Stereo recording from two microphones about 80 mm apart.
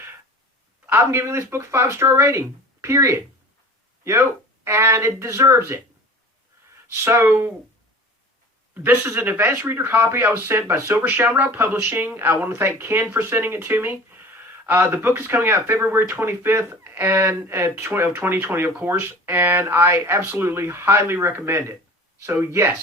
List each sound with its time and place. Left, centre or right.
0.9 s speech: right
8.7 s speech: right